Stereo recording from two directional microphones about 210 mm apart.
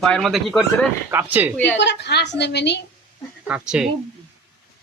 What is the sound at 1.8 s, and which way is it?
A woman's voice, 55° left (ahead or behind).